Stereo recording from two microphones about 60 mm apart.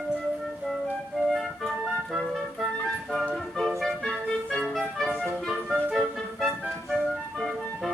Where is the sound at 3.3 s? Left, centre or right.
Centre.